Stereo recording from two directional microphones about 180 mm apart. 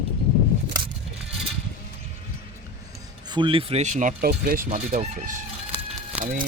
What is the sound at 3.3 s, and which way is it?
Speech, 30° right (ahead or behind).